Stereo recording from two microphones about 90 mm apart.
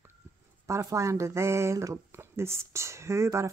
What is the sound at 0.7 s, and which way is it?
Speech, 35° right (ahead or behind).